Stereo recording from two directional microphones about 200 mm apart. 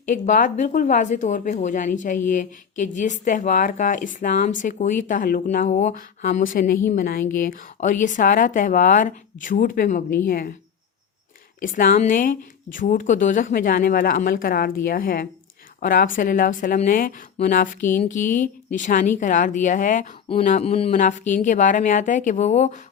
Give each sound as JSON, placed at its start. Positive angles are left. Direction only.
{"t": 0.1, "sound": "speech", "side_deg": 40}
{"t": 11.6, "sound": "speech", "side_deg": 45}